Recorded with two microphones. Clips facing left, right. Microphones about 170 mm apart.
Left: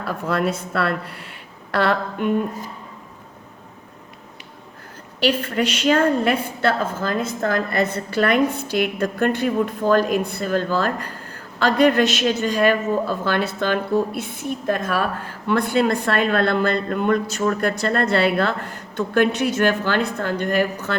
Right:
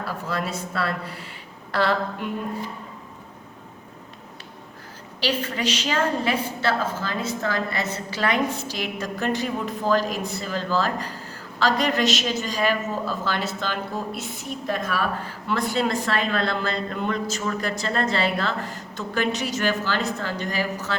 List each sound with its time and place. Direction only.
0.0 s a woman's voice: 60° left (ahead or behind)
5.2 s a woman's voice: 55° left (ahead or behind)